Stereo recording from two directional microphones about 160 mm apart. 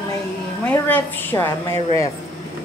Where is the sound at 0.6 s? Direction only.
10° left (ahead or behind).